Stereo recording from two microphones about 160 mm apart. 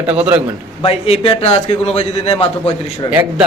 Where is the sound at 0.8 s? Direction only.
35° left (ahead or behind).